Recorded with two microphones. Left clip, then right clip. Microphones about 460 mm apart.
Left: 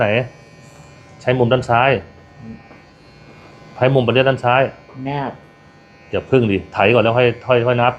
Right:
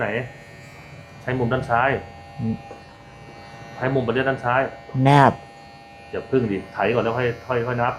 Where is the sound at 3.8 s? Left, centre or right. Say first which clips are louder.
Left 8 dB; left.